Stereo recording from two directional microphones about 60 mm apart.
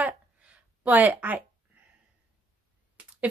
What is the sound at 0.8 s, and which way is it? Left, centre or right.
Speech, right.